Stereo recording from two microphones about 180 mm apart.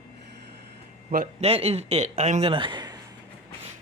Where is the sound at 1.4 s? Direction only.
35° right (ahead or behind).